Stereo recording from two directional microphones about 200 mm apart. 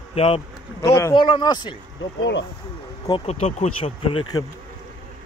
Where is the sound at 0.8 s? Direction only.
15° left (ahead or behind).